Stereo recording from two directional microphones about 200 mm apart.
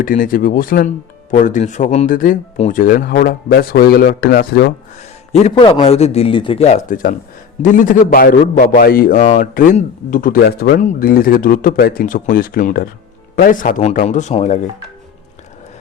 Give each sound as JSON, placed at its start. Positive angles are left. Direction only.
{"t": 0.0, "sound": "a man's voice", "side_deg": 40}
{"t": 5.3, "sound": "a man's voice", "side_deg": 30}